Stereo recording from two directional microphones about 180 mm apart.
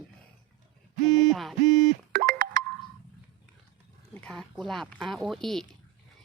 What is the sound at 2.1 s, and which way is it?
Music, 55° right (ahead or behind).